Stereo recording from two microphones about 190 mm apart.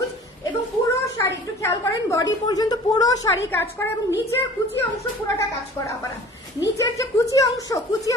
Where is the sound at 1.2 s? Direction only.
15° left (ahead or behind).